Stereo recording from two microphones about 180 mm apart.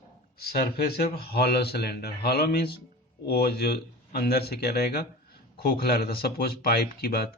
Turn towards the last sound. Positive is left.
turn(degrees=60)  # may be behind; listen again after turning